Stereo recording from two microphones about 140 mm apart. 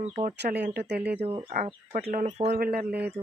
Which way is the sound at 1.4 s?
55° right (ahead or behind).